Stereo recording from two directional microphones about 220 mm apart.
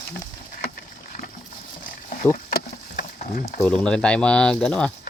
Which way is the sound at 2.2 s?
35° left (ahead or behind).